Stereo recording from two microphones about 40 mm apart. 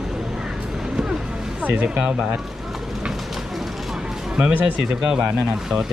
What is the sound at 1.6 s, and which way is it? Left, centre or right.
Speech, right.